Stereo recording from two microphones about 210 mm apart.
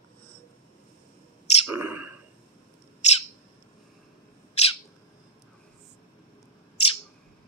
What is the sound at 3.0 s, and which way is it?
Bird, 30° left (ahead or behind).